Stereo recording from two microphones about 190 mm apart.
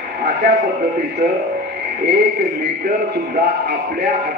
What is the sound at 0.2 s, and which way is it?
Speech, 60° right (ahead or behind).